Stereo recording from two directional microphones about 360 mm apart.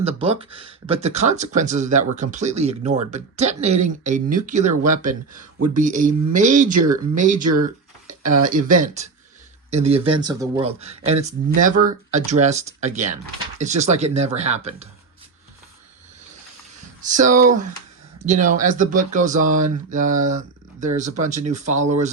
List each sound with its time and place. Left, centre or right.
0.0 s speech: centre
7.4 s speech: right
8.4 s speech: right
17.1 s speech: right